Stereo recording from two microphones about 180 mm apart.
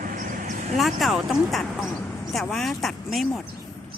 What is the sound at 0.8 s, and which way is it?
Speech, centre (ahead or behind).